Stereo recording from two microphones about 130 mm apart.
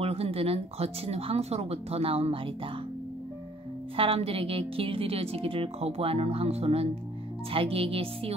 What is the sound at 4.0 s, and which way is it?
Speech, 45° right (ahead or behind).